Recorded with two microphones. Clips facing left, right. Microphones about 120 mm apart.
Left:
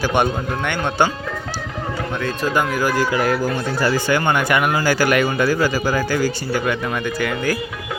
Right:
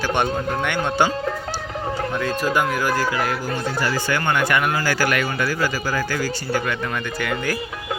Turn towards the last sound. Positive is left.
turn(degrees=0)  # may be behind; listen again after turning